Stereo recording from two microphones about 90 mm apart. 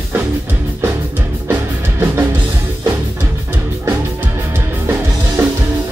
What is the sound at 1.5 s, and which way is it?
Music, 25° right (ahead or behind).